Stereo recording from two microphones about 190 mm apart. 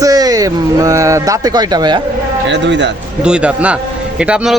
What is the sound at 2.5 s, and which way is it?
Speech, 70° right (ahead or behind).